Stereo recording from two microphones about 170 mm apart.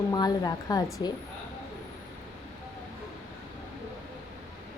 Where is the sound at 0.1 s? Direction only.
25° left (ahead or behind).